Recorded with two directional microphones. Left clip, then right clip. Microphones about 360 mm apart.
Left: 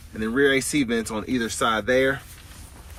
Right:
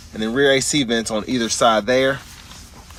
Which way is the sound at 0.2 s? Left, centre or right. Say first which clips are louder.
Right 4 dB; centre.